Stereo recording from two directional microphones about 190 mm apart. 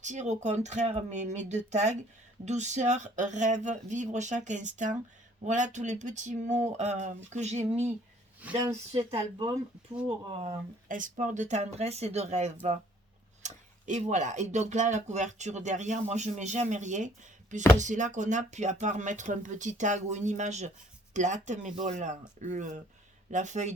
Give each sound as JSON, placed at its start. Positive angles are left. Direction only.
{"t": 0.0, "sound": "speech", "side_deg": -40}
{"t": 8.4, "sound": "speech", "side_deg": -10}
{"t": 8.9, "sound": "speech", "side_deg": -30}
{"t": 10.4, "sound": "speech", "side_deg": -45}